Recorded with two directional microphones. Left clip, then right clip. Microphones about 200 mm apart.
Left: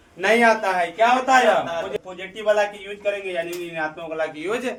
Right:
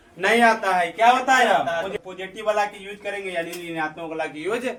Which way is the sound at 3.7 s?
15° left (ahead or behind).